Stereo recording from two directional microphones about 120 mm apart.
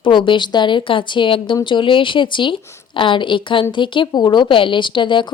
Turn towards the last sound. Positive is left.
turn(degrees=40)  # may be behind; listen again after turning